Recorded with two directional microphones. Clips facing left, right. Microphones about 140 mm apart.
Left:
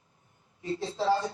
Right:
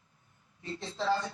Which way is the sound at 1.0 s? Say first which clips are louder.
Left 3 dB; 30° left (ahead or behind).